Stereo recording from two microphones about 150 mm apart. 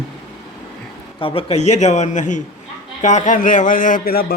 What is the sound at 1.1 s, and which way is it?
A man's voice, 35° left (ahead or behind).